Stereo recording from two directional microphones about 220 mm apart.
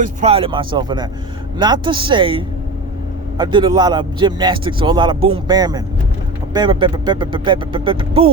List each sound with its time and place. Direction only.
0.0 s speech: 30° right (ahead or behind)